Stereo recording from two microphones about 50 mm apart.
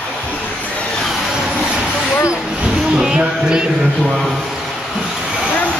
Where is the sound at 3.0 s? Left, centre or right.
Centre.